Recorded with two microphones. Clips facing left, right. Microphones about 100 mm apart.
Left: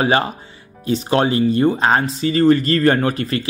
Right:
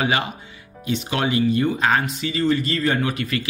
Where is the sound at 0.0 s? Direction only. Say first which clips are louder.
Left 5 dB; 35° left (ahead or behind).